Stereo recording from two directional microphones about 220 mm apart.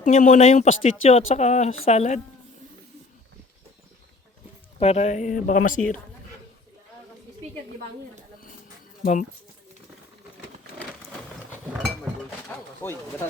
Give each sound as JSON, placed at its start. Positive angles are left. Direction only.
{"t": 0.0, "sound": "speech", "side_deg": 35}
{"t": 4.8, "sound": "speech", "side_deg": 30}
{"t": 12.5, "sound": "pigeon", "side_deg": 10}